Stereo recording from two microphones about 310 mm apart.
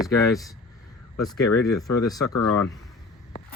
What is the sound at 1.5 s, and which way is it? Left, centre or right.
Speech, left.